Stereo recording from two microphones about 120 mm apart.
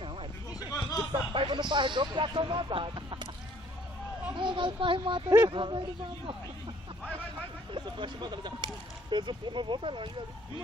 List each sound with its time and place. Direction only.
0.6 s a sound: 30° left (ahead or behind)
1.1 s speech: 40° right (ahead or behind)
4.4 s speech: 45° right (ahead or behind)
7.7 s speech: 40° right (ahead or behind)